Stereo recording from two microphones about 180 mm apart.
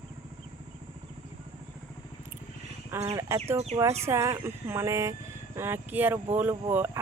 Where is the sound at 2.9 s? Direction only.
15° right (ahead or behind).